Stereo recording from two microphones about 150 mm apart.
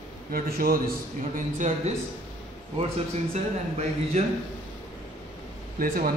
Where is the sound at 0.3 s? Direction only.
80° right.